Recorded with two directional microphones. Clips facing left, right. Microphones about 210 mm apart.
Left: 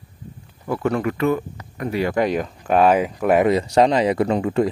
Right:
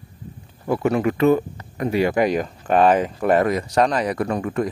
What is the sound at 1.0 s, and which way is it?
Speech, 25° right (ahead or behind).